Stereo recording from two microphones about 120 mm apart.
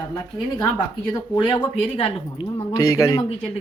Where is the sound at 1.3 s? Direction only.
40° left (ahead or behind).